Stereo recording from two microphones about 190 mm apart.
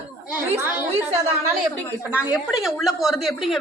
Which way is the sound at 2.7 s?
Centre (ahead or behind).